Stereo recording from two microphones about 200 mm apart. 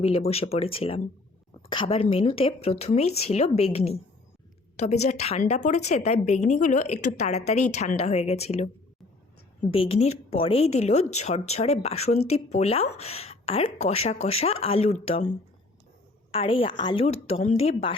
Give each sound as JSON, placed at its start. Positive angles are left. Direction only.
{"t": 0.0, "sound": "a woman's voice", "side_deg": 30}
{"t": 9.7, "sound": "a woman's voice", "side_deg": 30}